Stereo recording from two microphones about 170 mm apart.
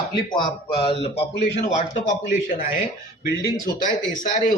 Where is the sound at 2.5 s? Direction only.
50° left (ahead or behind).